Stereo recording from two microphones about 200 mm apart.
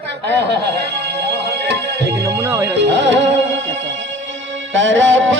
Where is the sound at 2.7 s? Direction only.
60° right (ahead or behind).